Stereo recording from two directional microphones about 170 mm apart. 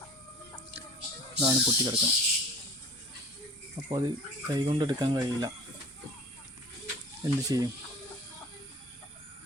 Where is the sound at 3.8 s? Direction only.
20° right (ahead or behind).